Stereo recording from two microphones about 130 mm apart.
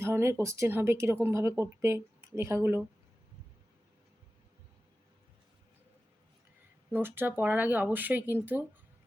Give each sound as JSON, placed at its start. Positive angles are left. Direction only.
{"t": 0.0, "sound": "speech", "side_deg": -20}
{"t": 6.9, "sound": "speech", "side_deg": -15}